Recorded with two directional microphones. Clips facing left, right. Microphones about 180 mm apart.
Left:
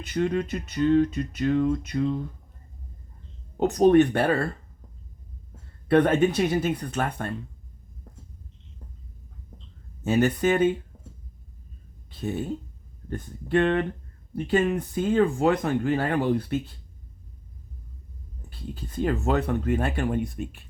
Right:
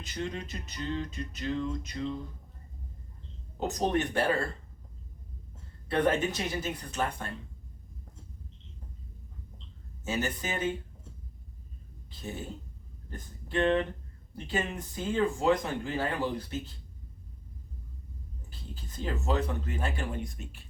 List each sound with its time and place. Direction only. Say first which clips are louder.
0.0 s speech: left 11 dB; 60° left (ahead or behind)
3.6 s speech: left 12 dB; 60° left (ahead or behind)
5.9 s speech: left 8 dB; 60° left (ahead or behind)
10.0 s speech: left 11 dB; 60° left (ahead or behind)
13.1 s speech: left 13 dB; 60° left (ahead or behind)
18.7 s speech: left 9 dB; 60° left (ahead or behind)